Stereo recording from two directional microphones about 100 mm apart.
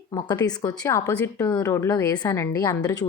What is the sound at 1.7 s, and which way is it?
Speech, 25° left (ahead or behind).